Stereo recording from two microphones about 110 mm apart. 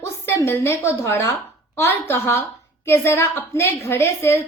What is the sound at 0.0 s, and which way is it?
A woman's voice, 25° left (ahead or behind).